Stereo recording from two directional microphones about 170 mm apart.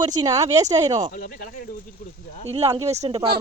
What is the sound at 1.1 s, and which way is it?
Speech, 60° left (ahead or behind).